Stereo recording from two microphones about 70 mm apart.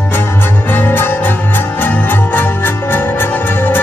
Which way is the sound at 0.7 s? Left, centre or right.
Left.